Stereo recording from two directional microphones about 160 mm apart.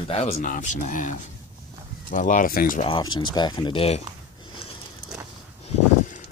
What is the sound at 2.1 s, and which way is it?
Speech, 55° left (ahead or behind).